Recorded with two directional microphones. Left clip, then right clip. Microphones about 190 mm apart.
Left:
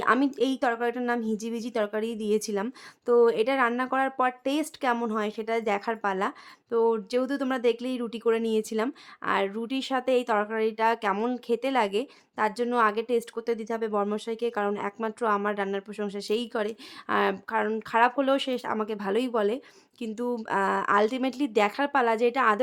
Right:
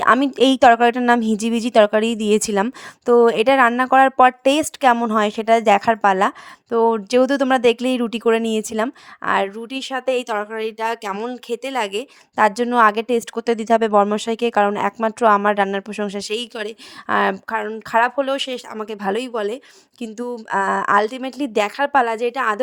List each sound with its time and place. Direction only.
0.0 s speech: 40° right (ahead or behind)